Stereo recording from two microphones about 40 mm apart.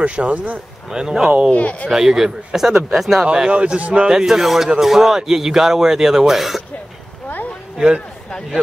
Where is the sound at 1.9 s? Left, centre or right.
Centre.